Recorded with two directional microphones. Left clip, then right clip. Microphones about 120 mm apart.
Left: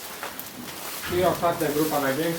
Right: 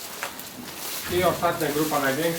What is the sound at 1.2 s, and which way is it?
Speech, 20° right (ahead or behind).